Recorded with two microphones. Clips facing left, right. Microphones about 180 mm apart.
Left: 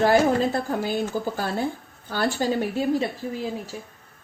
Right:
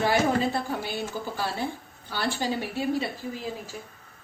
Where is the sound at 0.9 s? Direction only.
45° left (ahead or behind).